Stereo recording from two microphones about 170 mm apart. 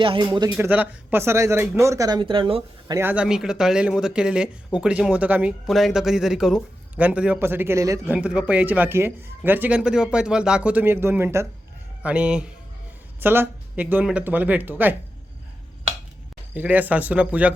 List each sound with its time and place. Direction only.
0.0 s a man's voice: 30° right (ahead or behind)
0.5 s a man's voice: 10° right (ahead or behind); by 2.6 s 30° right (ahead or behind)
2.8 s a man's voice: 15° right (ahead or behind)
16.6 s a man's voice: 10° right (ahead or behind)